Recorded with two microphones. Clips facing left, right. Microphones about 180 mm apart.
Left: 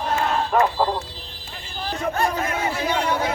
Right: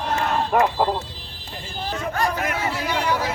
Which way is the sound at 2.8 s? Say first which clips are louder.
Left 1 dB; 25° left (ahead or behind).